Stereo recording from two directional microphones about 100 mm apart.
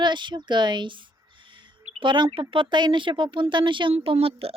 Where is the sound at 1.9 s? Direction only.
55° right (ahead or behind).